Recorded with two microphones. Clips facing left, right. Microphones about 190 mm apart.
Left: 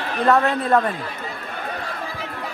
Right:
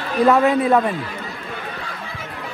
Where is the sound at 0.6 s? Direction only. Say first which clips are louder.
Right 2 dB; centre (ahead or behind).